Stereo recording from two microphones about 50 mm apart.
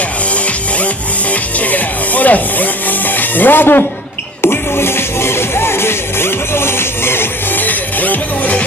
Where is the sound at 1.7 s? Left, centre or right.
Left.